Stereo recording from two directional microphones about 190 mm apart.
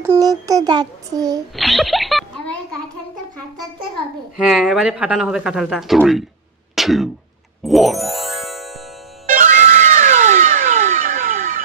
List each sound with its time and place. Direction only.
0.0 s a sound: 15° right (ahead or behind)
1.6 s a sound: centre (ahead or behind)
3.9 s a child's voice: 5° right (ahead or behind)
6.7 s throat clearing: centre (ahead or behind)
7.6 s music: centre (ahead or behind)
9.3 s music: 40° right (ahead or behind)